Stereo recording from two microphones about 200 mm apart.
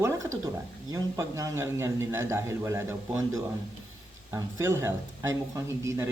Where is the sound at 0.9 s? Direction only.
15° right (ahead or behind).